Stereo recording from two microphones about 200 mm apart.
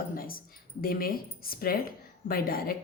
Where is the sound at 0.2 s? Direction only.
45° left (ahead or behind).